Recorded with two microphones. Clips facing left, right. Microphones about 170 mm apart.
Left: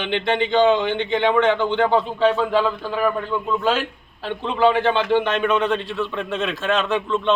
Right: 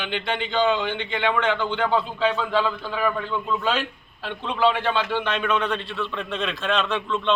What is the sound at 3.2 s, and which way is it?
A man's voice, 15° left (ahead or behind).